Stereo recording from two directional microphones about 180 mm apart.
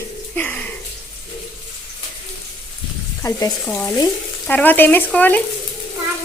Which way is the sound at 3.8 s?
20° left (ahead or behind).